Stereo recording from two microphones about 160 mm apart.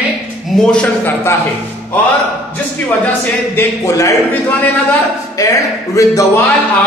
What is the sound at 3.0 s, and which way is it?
A man's voice, 15° left (ahead or behind).